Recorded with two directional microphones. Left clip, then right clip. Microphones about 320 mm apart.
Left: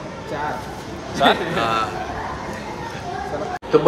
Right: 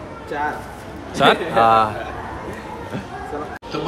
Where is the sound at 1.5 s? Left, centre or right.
Centre.